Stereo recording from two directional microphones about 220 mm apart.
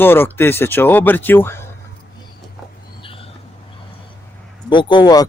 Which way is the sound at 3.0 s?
25° left (ahead or behind).